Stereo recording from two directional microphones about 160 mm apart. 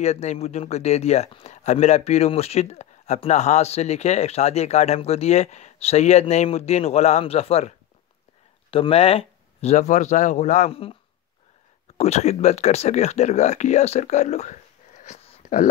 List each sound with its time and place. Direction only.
0.0 s speech: 45° left (ahead or behind)
12.0 s speech: 45° left (ahead or behind)
15.0 s a sound: 40° left (ahead or behind)